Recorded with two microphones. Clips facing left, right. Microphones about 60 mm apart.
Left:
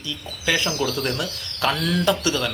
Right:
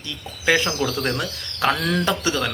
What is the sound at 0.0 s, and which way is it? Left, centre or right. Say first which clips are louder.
Speech: right 3 dB; right.